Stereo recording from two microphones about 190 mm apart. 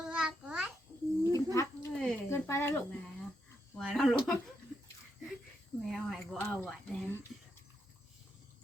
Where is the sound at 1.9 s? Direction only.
5° left (ahead or behind).